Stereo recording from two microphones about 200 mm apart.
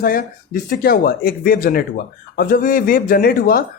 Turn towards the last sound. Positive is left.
turn(degrees=45)  # may be behind; listen again after turning